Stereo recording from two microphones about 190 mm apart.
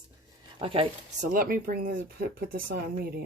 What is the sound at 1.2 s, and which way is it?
Speech, 50° right (ahead or behind).